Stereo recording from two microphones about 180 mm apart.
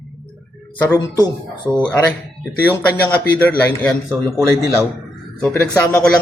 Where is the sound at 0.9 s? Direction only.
15° left (ahead or behind).